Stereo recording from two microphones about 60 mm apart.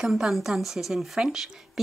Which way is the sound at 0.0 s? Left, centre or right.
Centre.